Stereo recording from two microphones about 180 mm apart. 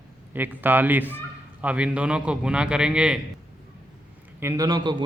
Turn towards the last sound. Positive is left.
turn(degrees=-25)  # may be behind; listen again after turning